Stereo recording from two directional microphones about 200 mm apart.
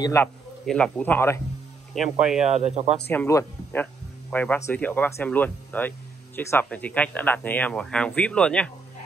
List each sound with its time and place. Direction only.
0.0 s speech: 15° left (ahead or behind)
2.0 s speech: 5° right (ahead or behind)
2.6 s speech: 35° right (ahead or behind)
3.1 s speech: 15° left (ahead or behind)